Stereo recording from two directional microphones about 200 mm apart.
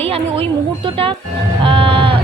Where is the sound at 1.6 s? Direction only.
25° right (ahead or behind).